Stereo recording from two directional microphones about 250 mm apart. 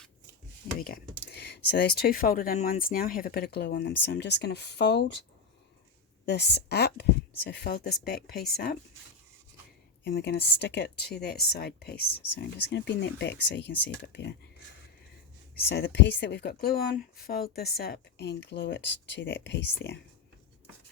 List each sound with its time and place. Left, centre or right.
1.3 s speech: left
6.2 s speech: left
10.0 s speech: left
15.7 s speech: left